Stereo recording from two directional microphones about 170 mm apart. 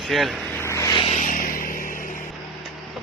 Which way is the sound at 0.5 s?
15° left (ahead or behind).